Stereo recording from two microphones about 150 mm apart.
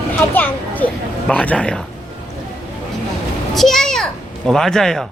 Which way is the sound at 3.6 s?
Centre (ahead or behind).